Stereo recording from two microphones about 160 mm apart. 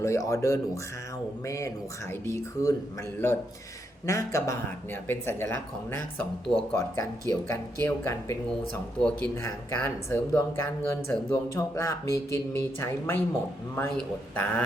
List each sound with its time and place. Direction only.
0.0 s speech: 20° left (ahead or behind)
4.0 s speech: 20° left (ahead or behind)